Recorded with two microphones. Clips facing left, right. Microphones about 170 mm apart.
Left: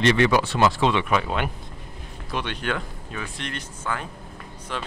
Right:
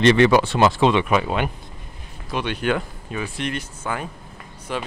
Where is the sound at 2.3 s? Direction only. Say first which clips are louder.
Right 5 dB; 5° right (ahead or behind).